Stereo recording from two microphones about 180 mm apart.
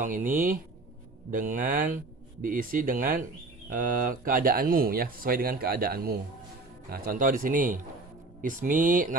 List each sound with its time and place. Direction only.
0.0 s speech: 50° right (ahead or behind)